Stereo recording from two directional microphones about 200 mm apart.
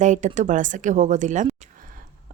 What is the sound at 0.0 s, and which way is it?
Speech, 35° right (ahead or behind).